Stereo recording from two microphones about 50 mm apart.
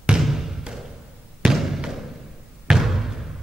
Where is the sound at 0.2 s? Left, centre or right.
Centre.